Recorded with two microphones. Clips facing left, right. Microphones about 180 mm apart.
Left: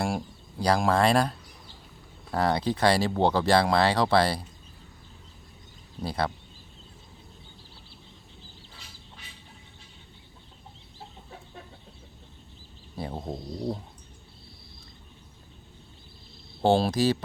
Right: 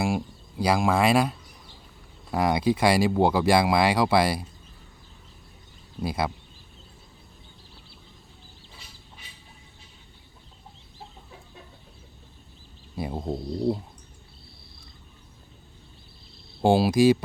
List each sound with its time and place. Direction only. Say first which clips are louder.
0.0 s speech: right 3 dB; 5° right (ahead or behind)
6.0 s speech: right 1 dB; 10° right (ahead or behind)
13.0 s speech: right 4 dB; 10° right (ahead or behind)
16.6 s speech: right 3 dB; 10° right (ahead or behind)